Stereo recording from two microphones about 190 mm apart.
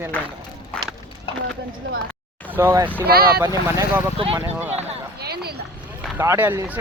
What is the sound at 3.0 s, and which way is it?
Speech, 55° right (ahead or behind).